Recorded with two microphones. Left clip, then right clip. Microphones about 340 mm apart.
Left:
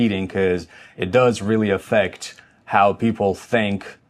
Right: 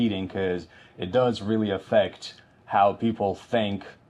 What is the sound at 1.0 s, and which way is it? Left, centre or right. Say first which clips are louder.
Speech: left 7 dB; left.